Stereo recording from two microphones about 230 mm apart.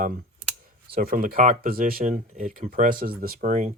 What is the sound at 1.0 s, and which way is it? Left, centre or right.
Speech, right.